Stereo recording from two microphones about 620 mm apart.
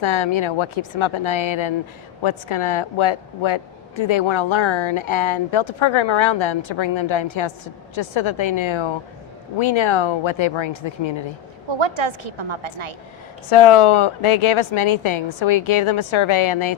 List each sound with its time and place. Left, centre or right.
0.0 s a woman's voice: left
11.7 s a woman's voice: right
13.5 s a woman's voice: left